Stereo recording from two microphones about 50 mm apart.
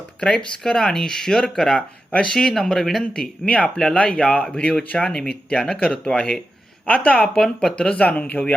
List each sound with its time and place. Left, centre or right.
0.2 s speech: centre
3.0 s speech: centre
6.8 s speech: left
7.3 s speech: centre
7.9 s speech: left